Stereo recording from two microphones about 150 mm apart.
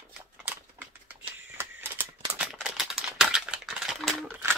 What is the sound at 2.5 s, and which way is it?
Typewriter, 5° right (ahead or behind).